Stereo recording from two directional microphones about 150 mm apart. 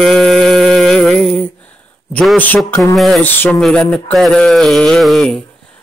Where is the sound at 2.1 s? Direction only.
10° left (ahead or behind).